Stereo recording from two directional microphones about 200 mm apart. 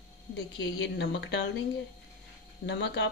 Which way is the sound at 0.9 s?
60° left (ahead or behind).